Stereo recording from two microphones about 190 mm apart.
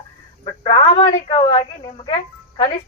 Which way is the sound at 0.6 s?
30° left (ahead or behind).